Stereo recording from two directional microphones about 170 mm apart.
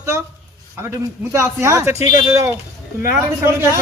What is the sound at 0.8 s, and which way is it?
A man's voice, 15° right (ahead or behind).